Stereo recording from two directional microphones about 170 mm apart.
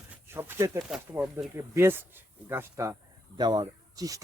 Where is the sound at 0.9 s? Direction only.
5° right (ahead or behind).